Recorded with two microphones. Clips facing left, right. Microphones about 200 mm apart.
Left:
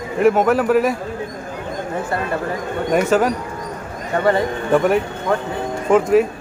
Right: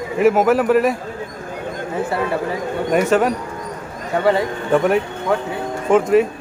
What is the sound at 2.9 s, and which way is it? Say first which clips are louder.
A man's voice: even; centre (ahead or behind).